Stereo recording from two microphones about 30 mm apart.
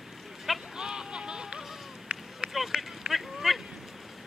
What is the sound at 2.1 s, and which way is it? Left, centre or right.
Run, right.